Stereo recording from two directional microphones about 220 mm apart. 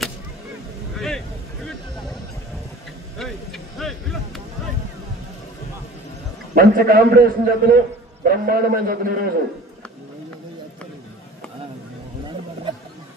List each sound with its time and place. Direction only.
0.9 s vehicle: centre (ahead or behind)
3.2 s a sound: centre (ahead or behind)
6.5 s a man's voice: 40° right (ahead or behind)